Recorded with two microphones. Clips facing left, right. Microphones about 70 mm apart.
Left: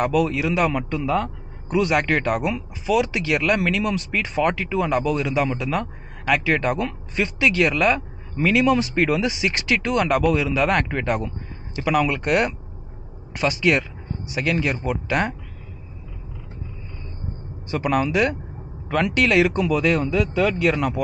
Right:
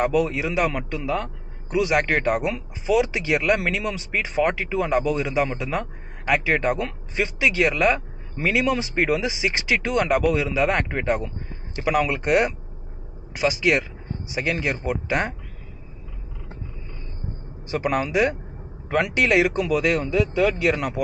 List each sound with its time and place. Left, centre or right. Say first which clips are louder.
0.0 s a man's voice: left 1 dB; right
0.7 s speech: left 3 dB; centre
17.6 s speech: left 2 dB; centre